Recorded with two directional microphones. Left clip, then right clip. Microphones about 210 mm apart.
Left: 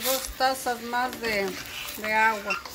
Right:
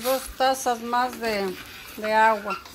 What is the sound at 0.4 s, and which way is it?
A woman's voice, 20° right (ahead or behind).